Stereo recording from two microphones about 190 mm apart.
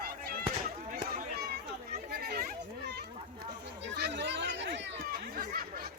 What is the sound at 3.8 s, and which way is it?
Chatter, 60° right (ahead or behind).